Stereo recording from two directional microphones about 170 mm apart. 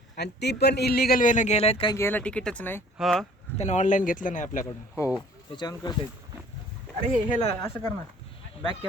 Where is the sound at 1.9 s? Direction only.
10° left (ahead or behind).